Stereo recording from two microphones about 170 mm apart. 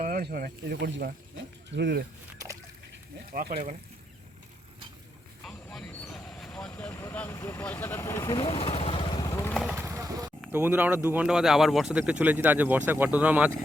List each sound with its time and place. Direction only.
0.0 s speech: 60° right (ahead or behind)
1.7 s speech: 80° right
3.5 s speech: 50° right (ahead or behind)
5.5 s speech: 5° left (ahead or behind); by 8.4 s 20° left (ahead or behind)
8.4 s vehicle: 35° left (ahead or behind); by 9.5 s 20° left (ahead or behind)
9.6 s clip-clop: 15° right (ahead or behind)
10.5 s speech: 10° right (ahead or behind)